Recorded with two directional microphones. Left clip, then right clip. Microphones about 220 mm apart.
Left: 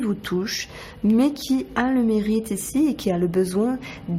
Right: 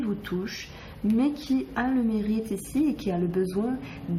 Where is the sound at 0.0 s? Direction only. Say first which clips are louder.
Left 6 dB; 45° left (ahead or behind).